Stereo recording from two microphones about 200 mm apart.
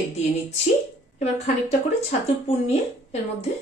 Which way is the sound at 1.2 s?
35° left (ahead or behind).